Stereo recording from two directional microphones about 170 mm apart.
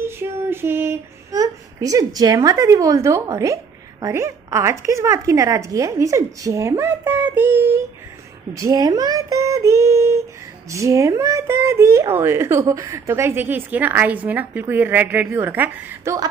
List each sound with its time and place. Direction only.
0.0 s child singing: 15° right (ahead or behind)
4.0 s speech: 15° right (ahead or behind)